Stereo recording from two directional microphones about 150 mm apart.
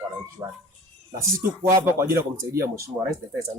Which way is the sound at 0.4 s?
20° right (ahead or behind).